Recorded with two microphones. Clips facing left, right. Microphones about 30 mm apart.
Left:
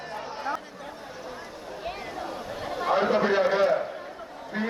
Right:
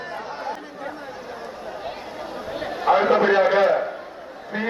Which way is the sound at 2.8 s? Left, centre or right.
Right.